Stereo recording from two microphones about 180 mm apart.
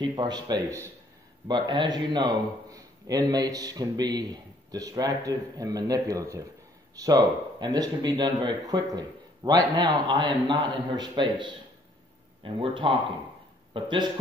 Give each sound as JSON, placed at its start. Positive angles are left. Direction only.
{"t": 0.0, "sound": "a man's voice", "side_deg": -25}